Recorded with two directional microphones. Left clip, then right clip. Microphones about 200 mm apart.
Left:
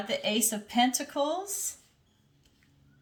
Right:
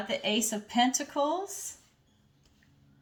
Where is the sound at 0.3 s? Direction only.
30° left (ahead or behind).